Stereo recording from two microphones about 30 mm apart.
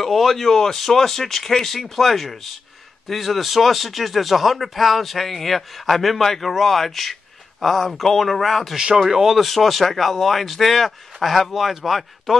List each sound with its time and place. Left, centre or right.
0.0 s speech: centre
8.7 s speech: right
9.0 s speech: centre
9.4 s speech: centre